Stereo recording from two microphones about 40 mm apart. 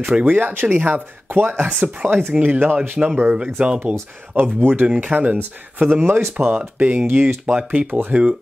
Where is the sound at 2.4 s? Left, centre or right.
Right.